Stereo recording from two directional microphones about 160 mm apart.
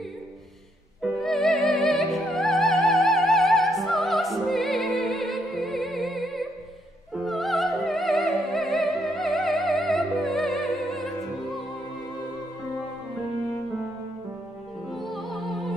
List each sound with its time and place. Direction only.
1.0 s music: centre (ahead or behind)
7.2 s opera: centre (ahead or behind)
14.9 s music: centre (ahead or behind)